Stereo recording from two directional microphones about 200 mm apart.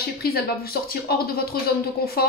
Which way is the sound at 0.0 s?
50° left (ahead or behind).